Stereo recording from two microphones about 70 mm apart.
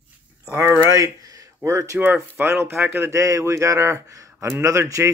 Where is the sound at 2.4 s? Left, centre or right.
Right.